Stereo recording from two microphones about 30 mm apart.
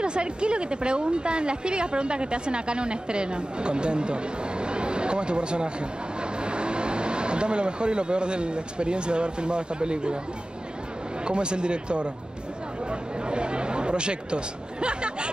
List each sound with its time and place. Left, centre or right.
0.0 s a woman's voice: right
11.2 s a woman's voice: right
13.3 s a woman's voice: right